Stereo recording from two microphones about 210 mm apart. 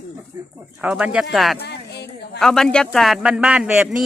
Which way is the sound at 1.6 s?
55° left (ahead or behind).